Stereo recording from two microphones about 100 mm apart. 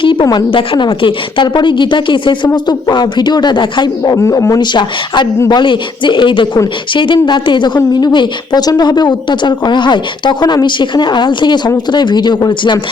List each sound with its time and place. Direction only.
0.0 s a sound: 55° left (ahead or behind)
0.5 s a woman's voice: 60° left (ahead or behind)
4.2 s speech: 30° left (ahead or behind); by 12.8 s 45° left (ahead or behind)